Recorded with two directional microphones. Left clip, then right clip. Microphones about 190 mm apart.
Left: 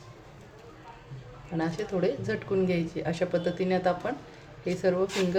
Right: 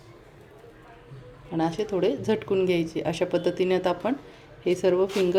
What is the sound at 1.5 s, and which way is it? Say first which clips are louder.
A woman's voice: right 4 dB; 40° right (ahead or behind).